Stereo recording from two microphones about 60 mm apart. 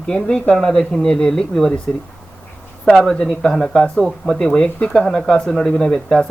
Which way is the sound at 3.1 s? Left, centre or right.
Centre.